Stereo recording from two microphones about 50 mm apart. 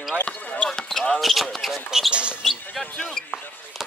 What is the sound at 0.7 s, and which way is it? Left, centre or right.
Basketball bounce, centre.